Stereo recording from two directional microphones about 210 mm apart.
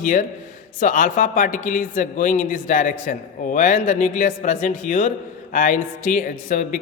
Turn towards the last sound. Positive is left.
turn(degrees=40)  # may be behind; listen again after turning